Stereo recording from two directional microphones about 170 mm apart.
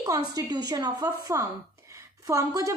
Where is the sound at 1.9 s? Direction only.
20° right (ahead or behind).